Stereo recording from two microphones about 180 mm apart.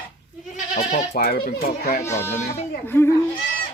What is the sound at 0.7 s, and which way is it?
Speech, 50° left (ahead or behind).